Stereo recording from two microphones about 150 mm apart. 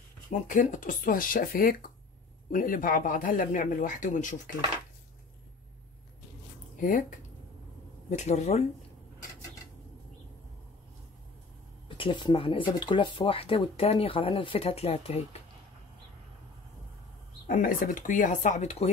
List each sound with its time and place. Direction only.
0.3 s speech: 60° left (ahead or behind)
6.8 s speech: 65° left (ahead or behind)
8.1 s speech: 50° left (ahead or behind)
12.0 s speech: 35° left (ahead or behind)
17.5 s speech: 70° left (ahead or behind); by 18.9 s 50° left (ahead or behind)